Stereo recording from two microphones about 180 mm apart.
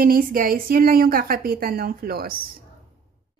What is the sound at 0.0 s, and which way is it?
Speech, 50° right (ahead or behind).